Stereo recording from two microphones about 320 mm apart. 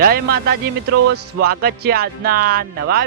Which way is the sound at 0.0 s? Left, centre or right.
Right.